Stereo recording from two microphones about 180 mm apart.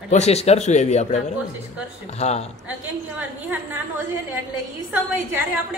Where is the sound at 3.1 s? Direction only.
10° right (ahead or behind).